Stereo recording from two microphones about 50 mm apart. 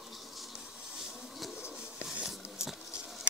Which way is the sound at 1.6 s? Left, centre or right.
Centre.